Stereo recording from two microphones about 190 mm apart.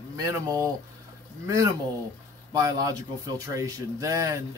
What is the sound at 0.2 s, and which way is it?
Speech, 15° right (ahead or behind).